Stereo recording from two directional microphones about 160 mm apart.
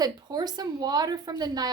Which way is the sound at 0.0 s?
25° right (ahead or behind).